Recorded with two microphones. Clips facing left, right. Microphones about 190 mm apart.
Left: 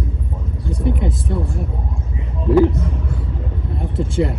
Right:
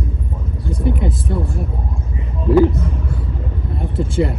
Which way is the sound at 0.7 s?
5° right (ahead or behind).